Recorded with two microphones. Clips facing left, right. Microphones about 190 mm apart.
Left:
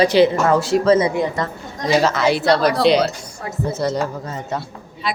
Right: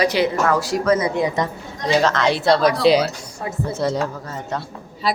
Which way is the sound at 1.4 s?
20° right (ahead or behind).